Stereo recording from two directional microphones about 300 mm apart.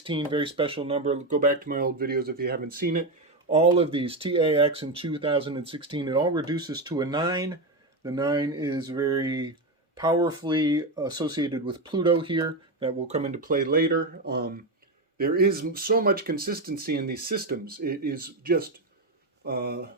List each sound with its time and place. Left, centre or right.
0.0 s speech: centre